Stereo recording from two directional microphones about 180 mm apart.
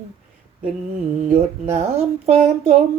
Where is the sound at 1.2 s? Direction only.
40° right (ahead or behind).